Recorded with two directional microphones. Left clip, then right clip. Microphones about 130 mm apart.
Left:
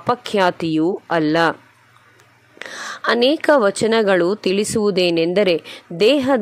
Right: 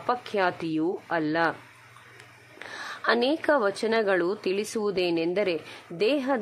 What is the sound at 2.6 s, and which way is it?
A woman's voice, 45° left (ahead or behind).